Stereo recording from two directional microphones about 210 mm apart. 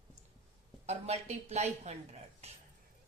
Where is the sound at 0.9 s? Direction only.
30° right (ahead or behind).